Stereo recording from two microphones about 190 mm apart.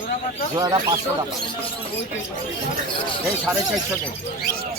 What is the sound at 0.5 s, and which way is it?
Speech, 20° right (ahead or behind).